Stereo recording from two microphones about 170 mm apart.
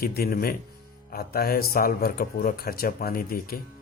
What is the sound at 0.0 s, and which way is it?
Speech, 60° left (ahead or behind).